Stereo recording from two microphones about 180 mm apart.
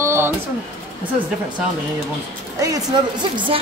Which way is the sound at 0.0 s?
15° right (ahead or behind).